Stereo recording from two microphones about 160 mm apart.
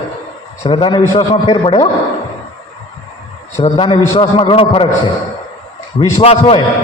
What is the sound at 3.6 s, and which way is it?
A man's voice, 35° left (ahead or behind).